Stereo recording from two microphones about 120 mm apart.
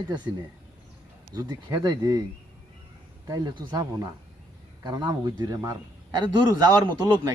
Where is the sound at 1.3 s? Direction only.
35° right (ahead or behind).